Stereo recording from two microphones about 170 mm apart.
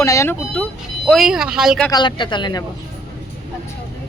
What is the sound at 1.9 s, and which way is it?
Speech, 25° left (ahead or behind).